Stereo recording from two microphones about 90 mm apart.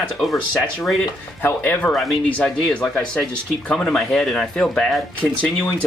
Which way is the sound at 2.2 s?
15° left (ahead or behind).